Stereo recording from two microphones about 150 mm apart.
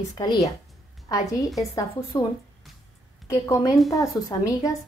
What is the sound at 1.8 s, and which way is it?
Speech, 20° left (ahead or behind).